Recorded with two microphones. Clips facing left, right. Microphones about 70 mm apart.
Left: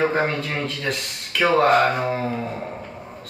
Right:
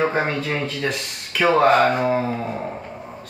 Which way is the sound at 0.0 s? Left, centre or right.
Centre.